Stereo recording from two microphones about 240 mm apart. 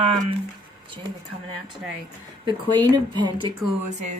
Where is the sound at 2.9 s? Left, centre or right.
Centre.